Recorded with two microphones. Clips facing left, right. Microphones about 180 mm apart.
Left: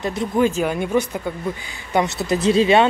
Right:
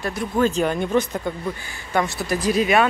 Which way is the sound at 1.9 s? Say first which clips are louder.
Left 3 dB; 20° left (ahead or behind).